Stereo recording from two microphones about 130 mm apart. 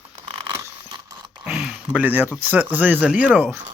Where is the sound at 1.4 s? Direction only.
5° right (ahead or behind).